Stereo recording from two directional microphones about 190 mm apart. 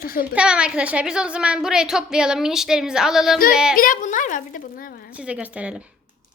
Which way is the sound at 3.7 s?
45° left (ahead or behind).